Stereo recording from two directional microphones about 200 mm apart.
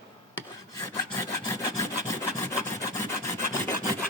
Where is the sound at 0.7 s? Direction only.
15° left (ahead or behind).